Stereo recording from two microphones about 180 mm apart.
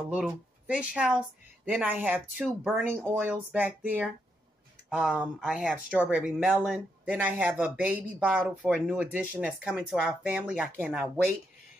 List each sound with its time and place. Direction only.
0.7 s a woman's voice: 5° right (ahead or behind)